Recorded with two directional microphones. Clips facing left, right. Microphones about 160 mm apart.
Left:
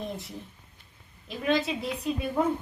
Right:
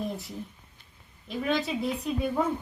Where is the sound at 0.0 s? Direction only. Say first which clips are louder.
Right 2 dB; centre (ahead or behind).